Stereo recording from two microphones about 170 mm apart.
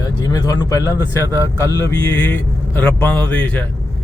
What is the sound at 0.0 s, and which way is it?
Speech, 20° left (ahead or behind).